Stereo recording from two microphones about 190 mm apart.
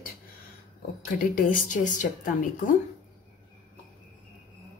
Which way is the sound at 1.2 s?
45° left (ahead or behind).